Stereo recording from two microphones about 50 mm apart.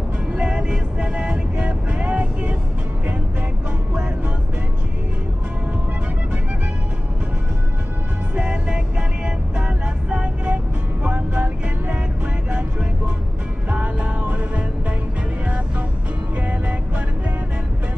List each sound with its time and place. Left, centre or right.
0.4 s music: right
8.4 s music: right
16.3 s music: right